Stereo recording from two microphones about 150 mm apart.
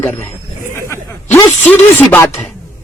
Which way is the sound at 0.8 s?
20° left (ahead or behind).